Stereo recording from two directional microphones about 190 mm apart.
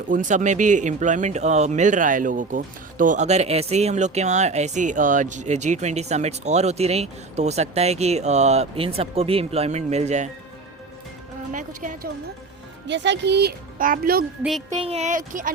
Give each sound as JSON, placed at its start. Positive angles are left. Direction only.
{"t": 0.1, "sound": "speech", "side_deg": -40}
{"t": 11.5, "sound": "a woman's voice", "side_deg": -45}
{"t": 12.9, "sound": "speech", "side_deg": -65}
{"t": 14.7, "sound": "speech", "side_deg": -30}